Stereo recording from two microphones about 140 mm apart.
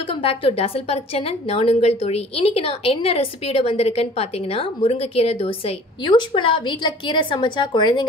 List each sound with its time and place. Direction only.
0.1 s a woman's voice: 40° left (ahead or behind)